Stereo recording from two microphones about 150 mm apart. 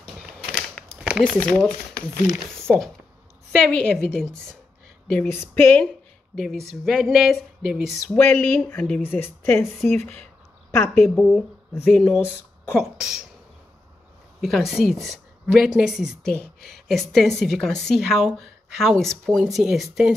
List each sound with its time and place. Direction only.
0.0 s a sound: 5° right (ahead or behind)
1.2 s speech: 10° left (ahead or behind)
2.7 s speech: 10° right (ahead or behind)
3.8 s a woman's voice: 5° left (ahead or behind)
5.3 s speech: 15° left (ahead or behind)
6.3 s a woman's voice: centre (ahead or behind)
8.1 s a woman's voice: 15° left (ahead or behind)
11.1 s a woman's voice: centre (ahead or behind)
12.8 s a woman's voice: centre (ahead or behind)
14.4 s a woman's voice: centre (ahead or behind)